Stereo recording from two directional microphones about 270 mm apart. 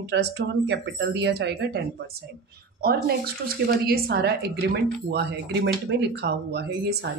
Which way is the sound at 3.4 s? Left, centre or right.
Right.